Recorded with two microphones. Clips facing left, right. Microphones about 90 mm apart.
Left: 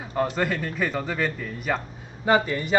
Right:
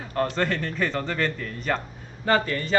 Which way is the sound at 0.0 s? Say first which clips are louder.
Even; 10° left (ahead or behind).